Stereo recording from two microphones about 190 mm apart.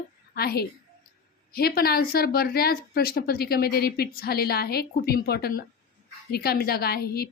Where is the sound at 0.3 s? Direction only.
55° left (ahead or behind).